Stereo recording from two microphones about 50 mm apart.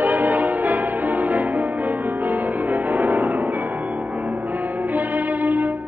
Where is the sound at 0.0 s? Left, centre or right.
Right.